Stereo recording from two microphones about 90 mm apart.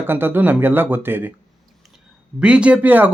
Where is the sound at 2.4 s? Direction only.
15° right (ahead or behind).